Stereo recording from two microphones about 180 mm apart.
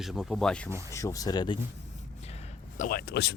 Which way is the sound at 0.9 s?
15° left (ahead or behind).